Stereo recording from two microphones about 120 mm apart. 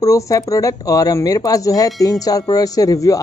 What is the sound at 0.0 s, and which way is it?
Speech, 30° left (ahead or behind).